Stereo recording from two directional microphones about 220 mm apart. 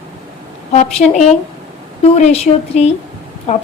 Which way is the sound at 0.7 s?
30° left (ahead or behind).